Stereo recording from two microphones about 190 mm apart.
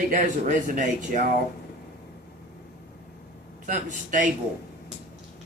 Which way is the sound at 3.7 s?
45° right (ahead or behind).